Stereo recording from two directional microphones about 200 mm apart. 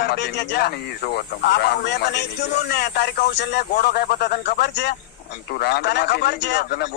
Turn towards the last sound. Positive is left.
turn(degrees=55)  # may be behind; listen again after turning